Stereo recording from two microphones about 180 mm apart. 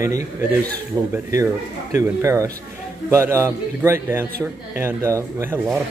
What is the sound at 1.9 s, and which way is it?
Speech, 15° right (ahead or behind).